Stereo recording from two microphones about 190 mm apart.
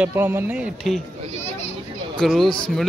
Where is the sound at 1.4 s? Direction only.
35° left (ahead or behind).